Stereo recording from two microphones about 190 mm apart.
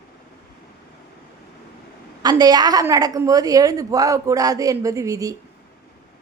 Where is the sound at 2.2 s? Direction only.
20° right (ahead or behind).